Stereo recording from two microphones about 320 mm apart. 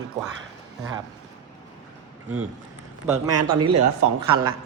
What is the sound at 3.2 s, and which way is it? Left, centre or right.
Speech, right.